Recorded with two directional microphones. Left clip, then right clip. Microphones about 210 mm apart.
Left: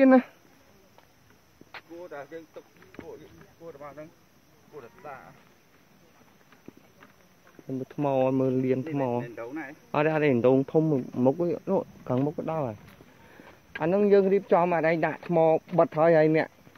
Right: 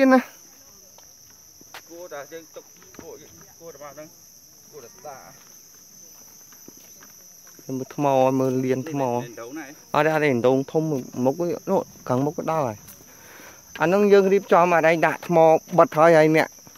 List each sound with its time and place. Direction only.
0.0 s speech: 10° right (ahead or behind)
2.0 s speech: 40° left (ahead or behind)
3.0 s speech: centre (ahead or behind)
3.6 s speech: 30° left (ahead or behind)
4.7 s speech: 5° left (ahead or behind)
7.6 s speech: 35° right (ahead or behind); by 9.2 s 15° right (ahead or behind)
9.2 s speech: 50° right (ahead or behind)
9.8 s speech: 15° right (ahead or behind)
11.6 s speech: 25° right (ahead or behind)
13.7 s speech: 35° right (ahead or behind)